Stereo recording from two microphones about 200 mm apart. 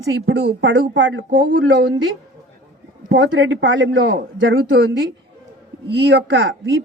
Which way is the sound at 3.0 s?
70° right (ahead or behind).